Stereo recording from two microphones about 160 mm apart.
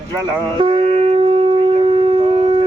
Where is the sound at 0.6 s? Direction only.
35° right (ahead or behind).